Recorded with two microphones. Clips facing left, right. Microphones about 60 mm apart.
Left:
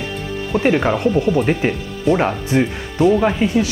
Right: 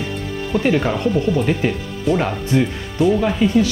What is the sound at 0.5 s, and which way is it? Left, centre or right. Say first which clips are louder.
Speech: left 2 dB; left.